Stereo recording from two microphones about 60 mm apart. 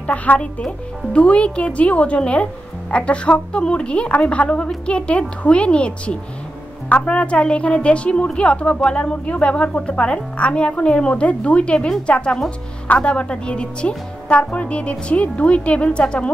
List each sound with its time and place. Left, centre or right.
0.0 s a woman's voice: left